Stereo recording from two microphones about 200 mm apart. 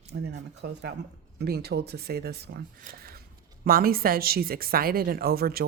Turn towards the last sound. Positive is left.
turn(degrees=-50)  # may be behind; listen again after turning